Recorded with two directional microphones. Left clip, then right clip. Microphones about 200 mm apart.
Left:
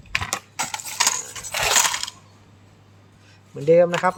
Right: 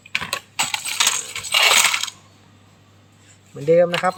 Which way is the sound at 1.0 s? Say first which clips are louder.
Right 1 dB; 5° right (ahead or behind).